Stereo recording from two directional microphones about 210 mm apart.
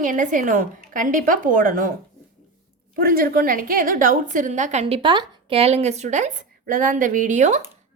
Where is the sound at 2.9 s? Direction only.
45° right (ahead or behind).